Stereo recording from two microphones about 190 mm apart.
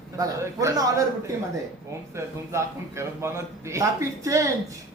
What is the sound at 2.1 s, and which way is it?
A woman's voice, 15° right (ahead or behind).